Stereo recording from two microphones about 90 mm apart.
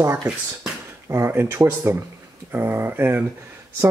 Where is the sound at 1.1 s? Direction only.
25° right (ahead or behind).